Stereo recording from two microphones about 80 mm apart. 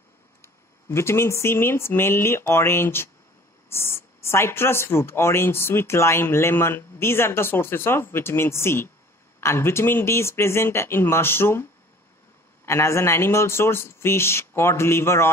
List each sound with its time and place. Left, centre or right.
0.4 s speech: left
12.6 s speech: left